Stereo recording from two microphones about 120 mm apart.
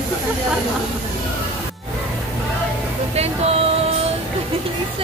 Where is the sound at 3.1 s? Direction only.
60° right (ahead or behind).